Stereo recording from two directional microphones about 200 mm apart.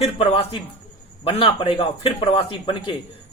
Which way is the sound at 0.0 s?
30° left (ahead or behind).